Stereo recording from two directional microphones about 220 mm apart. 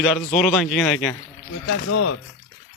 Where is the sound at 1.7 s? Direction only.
60° left (ahead or behind).